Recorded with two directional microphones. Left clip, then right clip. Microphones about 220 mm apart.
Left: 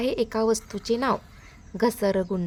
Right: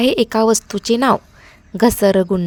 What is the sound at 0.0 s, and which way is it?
A woman's voice, 40° right (ahead or behind).